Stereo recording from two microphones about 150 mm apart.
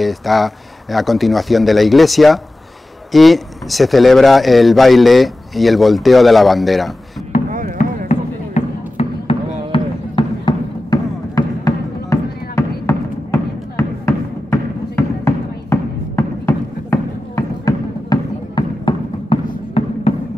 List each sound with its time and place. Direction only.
0.0 s speech: centre (ahead or behind)
8.1 s basketball bounce: 45° left (ahead or behind)